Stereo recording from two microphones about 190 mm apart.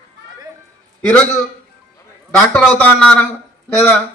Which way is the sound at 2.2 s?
10° left (ahead or behind).